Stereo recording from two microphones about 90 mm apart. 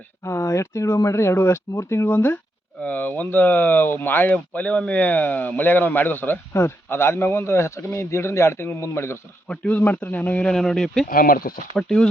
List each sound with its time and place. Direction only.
0.3 s speech: 35° left (ahead or behind)
9.5 s a man's voice: 15° left (ahead or behind)